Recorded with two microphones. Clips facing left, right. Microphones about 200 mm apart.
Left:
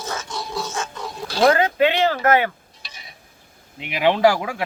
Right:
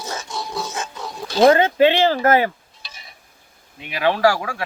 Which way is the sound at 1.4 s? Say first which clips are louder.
Right 3 dB; 25° right (ahead or behind).